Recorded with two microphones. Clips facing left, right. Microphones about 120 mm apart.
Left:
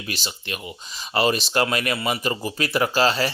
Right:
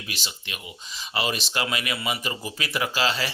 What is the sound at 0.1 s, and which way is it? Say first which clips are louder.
Speech: left 8 dB; 40° left (ahead or behind).